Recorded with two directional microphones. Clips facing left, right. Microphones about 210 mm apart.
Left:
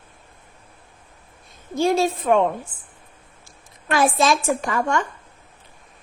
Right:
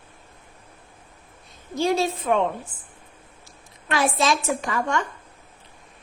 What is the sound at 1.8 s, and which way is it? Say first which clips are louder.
Speech: left 3 dB; 50° left (ahead or behind).